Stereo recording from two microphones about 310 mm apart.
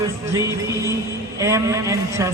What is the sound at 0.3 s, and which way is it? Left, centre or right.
A man's voice, centre.